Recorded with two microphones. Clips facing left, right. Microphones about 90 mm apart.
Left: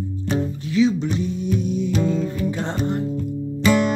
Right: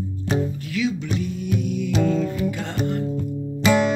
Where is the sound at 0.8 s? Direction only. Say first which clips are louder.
Left 6 dB; 30° left (ahead or behind).